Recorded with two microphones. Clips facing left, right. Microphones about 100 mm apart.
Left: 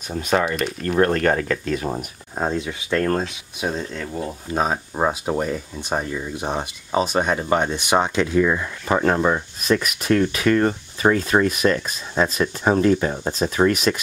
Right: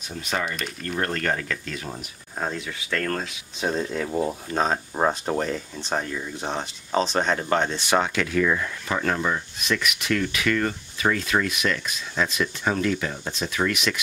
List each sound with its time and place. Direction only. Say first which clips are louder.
0.1 s speech: left 8 dB; 50° left (ahead or behind)
2.3 s speech: left 6 dB; 20° left (ahead or behind)
3.6 s speech: right 1 dB; 5° right (ahead or behind)
4.5 s speech: left 2 dB; 10° left (ahead or behind)
8.8 s speech: left 8 dB; 35° left (ahead or behind)